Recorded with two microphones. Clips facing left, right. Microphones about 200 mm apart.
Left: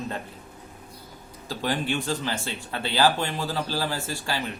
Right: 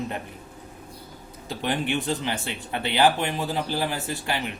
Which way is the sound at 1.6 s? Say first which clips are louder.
Right 1 dB; 20° right (ahead or behind).